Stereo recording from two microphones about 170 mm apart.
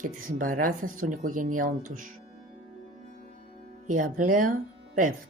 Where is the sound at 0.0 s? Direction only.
50° right (ahead or behind).